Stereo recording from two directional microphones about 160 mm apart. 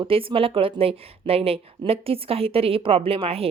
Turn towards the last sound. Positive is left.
turn(degrees=-35)  # may be behind; listen again after turning